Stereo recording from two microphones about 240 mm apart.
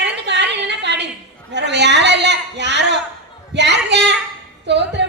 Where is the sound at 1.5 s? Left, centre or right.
Right.